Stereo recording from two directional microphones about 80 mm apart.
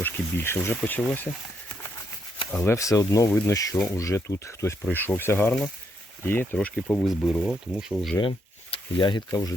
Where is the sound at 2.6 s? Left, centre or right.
Left.